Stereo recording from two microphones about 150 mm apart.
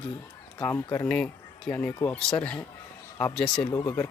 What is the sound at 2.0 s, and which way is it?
Speech, 10° left (ahead or behind).